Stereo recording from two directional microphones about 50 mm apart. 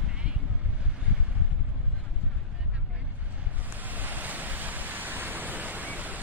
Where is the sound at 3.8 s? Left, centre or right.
Right.